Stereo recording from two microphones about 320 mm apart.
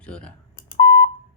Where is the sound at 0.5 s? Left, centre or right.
Left.